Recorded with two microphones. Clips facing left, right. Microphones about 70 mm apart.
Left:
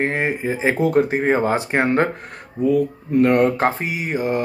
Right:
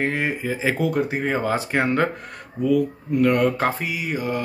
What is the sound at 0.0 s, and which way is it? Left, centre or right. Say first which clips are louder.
Speech: left 3 dB; left.